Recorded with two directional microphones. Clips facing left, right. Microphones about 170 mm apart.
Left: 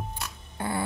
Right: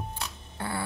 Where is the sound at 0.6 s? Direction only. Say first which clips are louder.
Left 3 dB; 15° left (ahead or behind).